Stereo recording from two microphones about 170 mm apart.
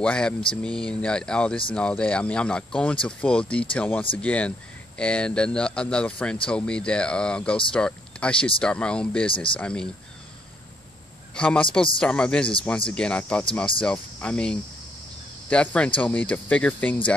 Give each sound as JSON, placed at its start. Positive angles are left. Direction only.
{"t": 0.0, "sound": "speech", "side_deg": 5}
{"t": 9.3, "sound": "speech", "side_deg": 30}
{"t": 9.6, "sound": "speech", "side_deg": 5}
{"t": 11.3, "sound": "speech", "side_deg": 5}